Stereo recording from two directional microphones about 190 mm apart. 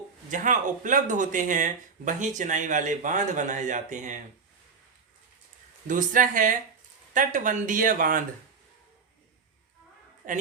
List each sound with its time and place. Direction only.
0.3 s speech: 40° right (ahead or behind)
5.9 s speech: 45° right (ahead or behind)
10.2 s a woman's voice: 45° right (ahead or behind)